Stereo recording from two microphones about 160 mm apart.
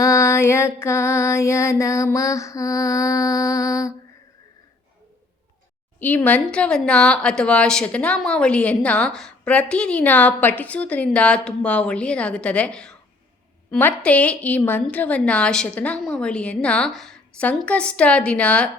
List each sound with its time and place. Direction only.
0.0 s music: 20° left (ahead or behind)
6.0 s speech: 10° left (ahead or behind)